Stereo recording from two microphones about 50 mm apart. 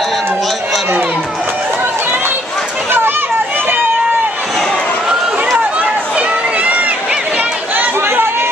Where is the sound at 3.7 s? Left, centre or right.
Right.